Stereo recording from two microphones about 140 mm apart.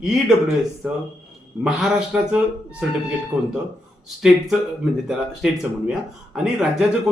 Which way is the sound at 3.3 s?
25° right (ahead or behind).